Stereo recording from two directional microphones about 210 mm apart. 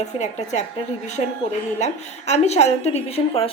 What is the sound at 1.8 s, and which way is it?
A woman's voice, 30° left (ahead or behind).